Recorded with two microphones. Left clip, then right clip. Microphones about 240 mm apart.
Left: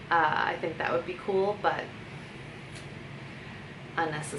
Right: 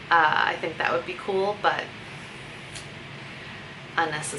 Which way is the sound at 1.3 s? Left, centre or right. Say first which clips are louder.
Right 2 dB; left.